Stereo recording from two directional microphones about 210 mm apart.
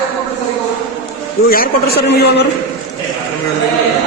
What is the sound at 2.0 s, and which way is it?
Speech, 50° left (ahead or behind).